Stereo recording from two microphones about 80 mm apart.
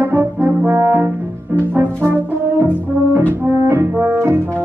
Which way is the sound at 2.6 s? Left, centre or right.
Right.